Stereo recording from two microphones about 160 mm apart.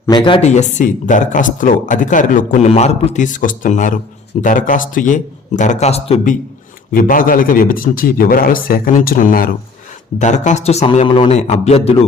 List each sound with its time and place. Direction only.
0.1 s speech: 30° left (ahead or behind); by 2.6 s 55° left (ahead or behind)
2.6 s speech: 40° left (ahead or behind)
6.9 s a man's voice: 60° left (ahead or behind)
10.2 s speech: 50° left (ahead or behind)